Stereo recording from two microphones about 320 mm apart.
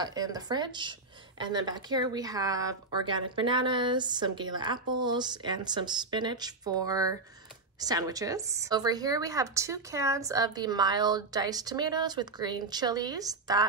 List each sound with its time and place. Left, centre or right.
0.0 s a woman's voice: centre